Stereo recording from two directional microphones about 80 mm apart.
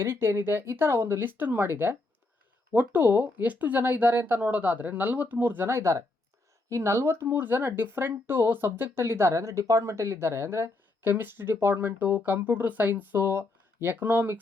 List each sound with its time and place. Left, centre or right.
0.0 s speech: right